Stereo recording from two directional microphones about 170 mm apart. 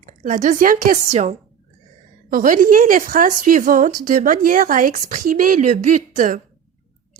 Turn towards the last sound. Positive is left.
turn(degrees=-50)  # may be behind; listen again after turning